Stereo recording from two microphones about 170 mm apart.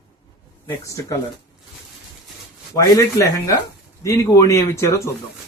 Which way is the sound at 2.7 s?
20° left (ahead or behind).